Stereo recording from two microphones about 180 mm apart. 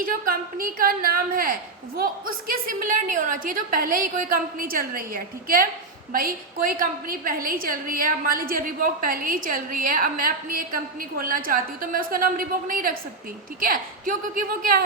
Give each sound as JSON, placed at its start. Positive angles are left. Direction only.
{"t": 0.0, "sound": "a woman's voice", "side_deg": -50}